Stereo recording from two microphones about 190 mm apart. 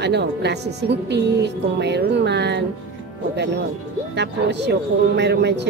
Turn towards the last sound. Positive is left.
turn(degrees=-65)  # may be behind; listen again after turning